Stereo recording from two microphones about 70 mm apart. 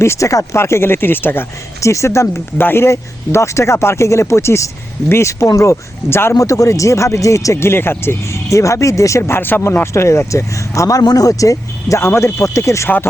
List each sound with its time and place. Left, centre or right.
0.0 s speech: left
0.6 s speech: left
1.8 s speech: left
2.6 s speech: left
6.3 s speech: left
9.6 s speech: left
11.0 s speech: left